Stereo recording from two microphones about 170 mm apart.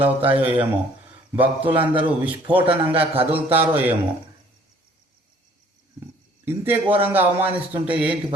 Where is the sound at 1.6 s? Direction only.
30° right (ahead or behind).